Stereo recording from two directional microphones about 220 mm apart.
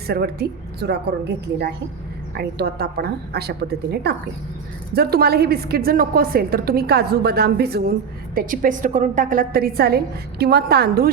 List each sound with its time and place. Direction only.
0.1 s a woman's voice: 45° right (ahead or behind)
2.3 s a woman's voice: 45° right (ahead or behind)